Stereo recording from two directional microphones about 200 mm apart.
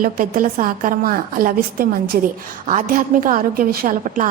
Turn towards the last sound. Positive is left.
turn(degrees=-40)  # may be behind; listen again after turning